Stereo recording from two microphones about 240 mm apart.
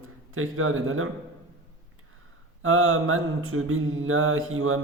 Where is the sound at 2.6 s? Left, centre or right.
Right.